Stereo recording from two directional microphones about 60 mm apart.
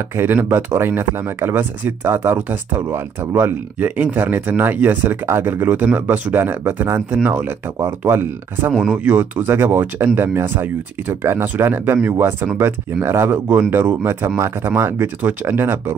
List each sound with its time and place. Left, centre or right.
0.2 s speech: right